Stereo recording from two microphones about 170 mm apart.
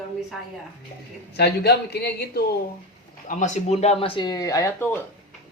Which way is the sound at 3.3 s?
45° left (ahead or behind).